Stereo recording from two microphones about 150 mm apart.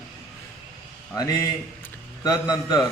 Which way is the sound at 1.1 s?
25° left (ahead or behind).